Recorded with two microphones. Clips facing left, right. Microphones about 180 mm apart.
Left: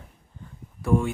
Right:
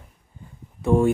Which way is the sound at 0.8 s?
20° right (ahead or behind).